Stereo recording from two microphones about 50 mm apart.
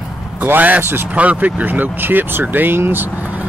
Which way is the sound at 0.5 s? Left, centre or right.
Right.